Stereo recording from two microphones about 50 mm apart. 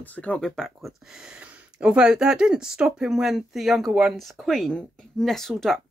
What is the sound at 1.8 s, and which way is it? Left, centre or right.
Speech, centre.